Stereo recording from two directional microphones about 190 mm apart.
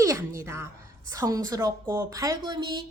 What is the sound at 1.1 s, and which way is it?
A woman's voice, 20° right (ahead or behind).